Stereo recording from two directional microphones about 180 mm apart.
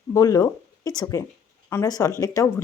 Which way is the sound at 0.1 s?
20° left (ahead or behind).